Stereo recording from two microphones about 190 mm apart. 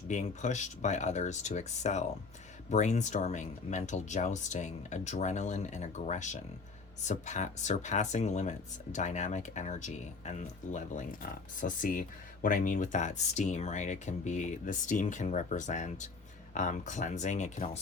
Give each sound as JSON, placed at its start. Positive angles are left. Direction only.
{"t": 0.1, "sound": "speech", "side_deg": 40}